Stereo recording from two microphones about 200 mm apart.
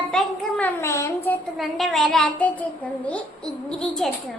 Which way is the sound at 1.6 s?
Centre (ahead or behind).